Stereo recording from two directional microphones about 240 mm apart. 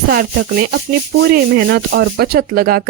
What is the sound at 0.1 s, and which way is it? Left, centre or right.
Speech, right.